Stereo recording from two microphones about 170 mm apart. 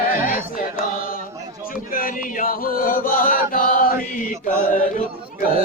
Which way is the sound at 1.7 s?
55° left (ahead or behind).